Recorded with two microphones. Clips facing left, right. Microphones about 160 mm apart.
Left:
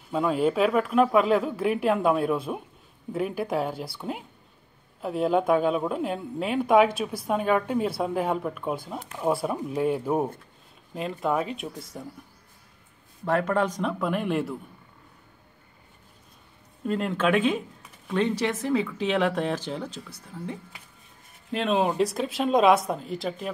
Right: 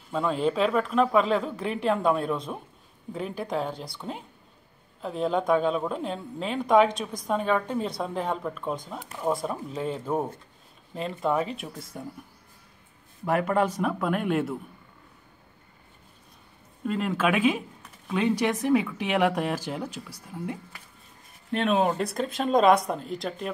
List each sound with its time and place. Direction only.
0.1 s speech: 5° left (ahead or behind)
13.2 s speech: 10° right (ahead or behind)
16.8 s speech: centre (ahead or behind)
21.6 s speech: 5° left (ahead or behind)